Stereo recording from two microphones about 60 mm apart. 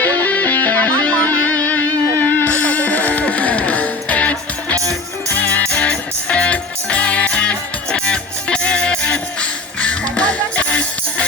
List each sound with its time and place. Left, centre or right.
0.0 s music: left